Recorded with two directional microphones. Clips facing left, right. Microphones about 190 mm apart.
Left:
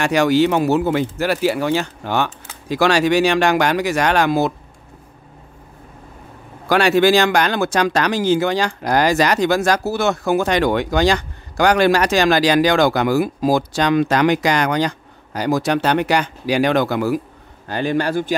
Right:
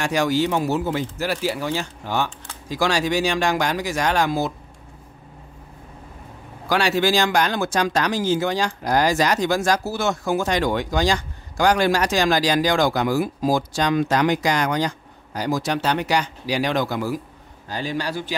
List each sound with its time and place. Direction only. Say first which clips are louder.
0.0 s speech: left 6 dB; 70° left (ahead or behind)
6.7 s a man's voice: left 6 dB; 55° left (ahead or behind)